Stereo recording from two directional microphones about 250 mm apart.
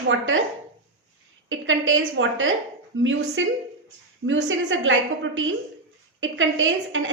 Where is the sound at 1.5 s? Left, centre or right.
Right.